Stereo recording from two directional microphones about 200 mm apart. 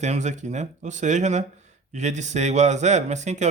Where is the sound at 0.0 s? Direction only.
35° right (ahead or behind).